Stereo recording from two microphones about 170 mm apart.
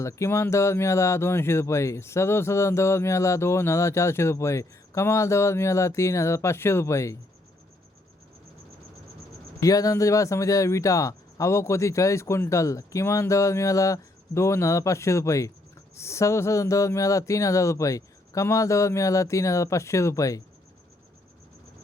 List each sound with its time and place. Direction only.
0.0 s speech: 15° left (ahead or behind)
9.6 s speech: 20° left (ahead or behind)